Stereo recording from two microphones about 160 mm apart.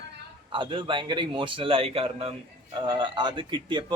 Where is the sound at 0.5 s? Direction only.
30° right (ahead or behind).